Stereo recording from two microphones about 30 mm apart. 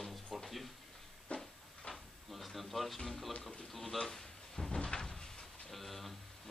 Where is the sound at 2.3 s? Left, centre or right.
Centre.